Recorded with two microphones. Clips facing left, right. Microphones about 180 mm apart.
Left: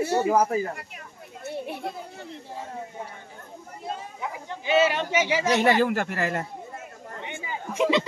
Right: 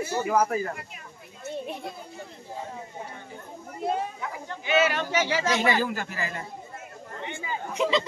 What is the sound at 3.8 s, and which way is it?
Speech, 65° right (ahead or behind).